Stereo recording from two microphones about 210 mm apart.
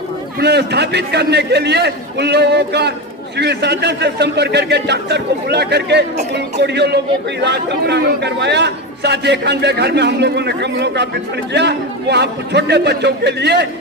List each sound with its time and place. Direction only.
0.3 s speech: 50° right (ahead or behind)